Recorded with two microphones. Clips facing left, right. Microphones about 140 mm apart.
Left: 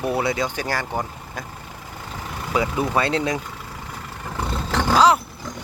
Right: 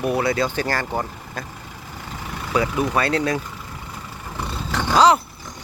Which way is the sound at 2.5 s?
25° left (ahead or behind).